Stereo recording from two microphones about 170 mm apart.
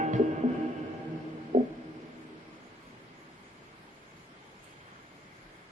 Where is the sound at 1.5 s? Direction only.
45° right (ahead or behind).